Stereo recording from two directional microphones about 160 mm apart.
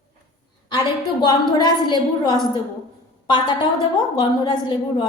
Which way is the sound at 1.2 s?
25° left (ahead or behind).